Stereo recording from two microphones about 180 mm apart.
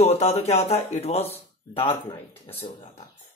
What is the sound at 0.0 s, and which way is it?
Speech, 35° left (ahead or behind).